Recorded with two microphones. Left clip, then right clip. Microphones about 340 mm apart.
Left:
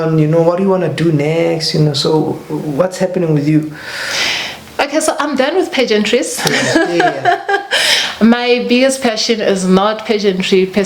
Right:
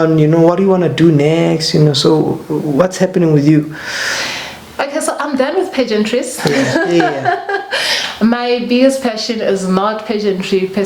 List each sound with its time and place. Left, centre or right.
0.2 s speech: right
4.8 s a sound: left
7.0 s a woman's voice: left